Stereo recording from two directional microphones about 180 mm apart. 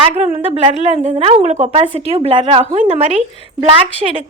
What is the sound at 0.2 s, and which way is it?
A woman's voice, 35° right (ahead or behind).